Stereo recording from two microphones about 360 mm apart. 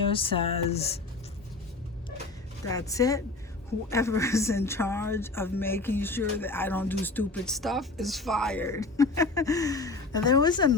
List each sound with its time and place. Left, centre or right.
0.0 s a woman's voice: centre
2.6 s a woman's voice: centre